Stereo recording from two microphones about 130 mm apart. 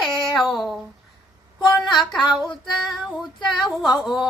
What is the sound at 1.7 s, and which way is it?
Speech, centre (ahead or behind).